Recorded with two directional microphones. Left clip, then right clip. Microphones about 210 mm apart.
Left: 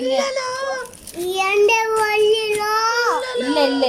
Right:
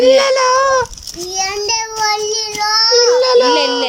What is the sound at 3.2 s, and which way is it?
Speech, 40° right (ahead or behind).